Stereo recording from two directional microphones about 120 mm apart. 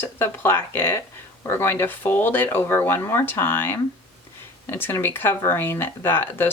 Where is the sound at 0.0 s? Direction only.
20° left (ahead or behind).